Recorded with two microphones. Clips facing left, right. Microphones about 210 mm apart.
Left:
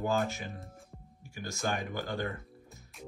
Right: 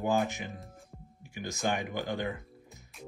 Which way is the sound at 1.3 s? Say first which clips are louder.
Right 2 dB; 15° right (ahead or behind).